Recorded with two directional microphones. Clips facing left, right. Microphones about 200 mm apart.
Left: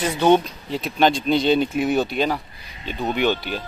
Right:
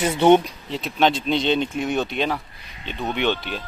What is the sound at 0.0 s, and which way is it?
Speech, 20° right (ahead or behind).